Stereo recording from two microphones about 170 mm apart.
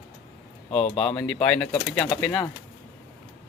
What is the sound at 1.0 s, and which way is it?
Speech, 5° left (ahead or behind).